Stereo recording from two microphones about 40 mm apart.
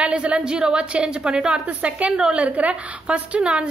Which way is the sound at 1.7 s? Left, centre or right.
Right.